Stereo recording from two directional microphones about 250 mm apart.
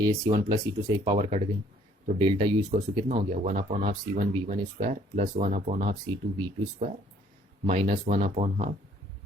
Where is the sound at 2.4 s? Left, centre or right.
Right.